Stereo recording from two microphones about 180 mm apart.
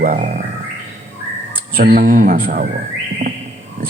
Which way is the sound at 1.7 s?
50° right (ahead or behind).